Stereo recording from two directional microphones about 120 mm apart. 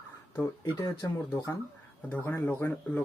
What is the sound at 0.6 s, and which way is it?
Speech, 30° left (ahead or behind).